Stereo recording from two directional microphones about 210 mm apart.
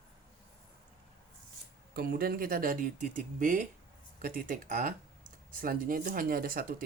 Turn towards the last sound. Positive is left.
turn(degrees=-45)  # may be behind; listen again after turning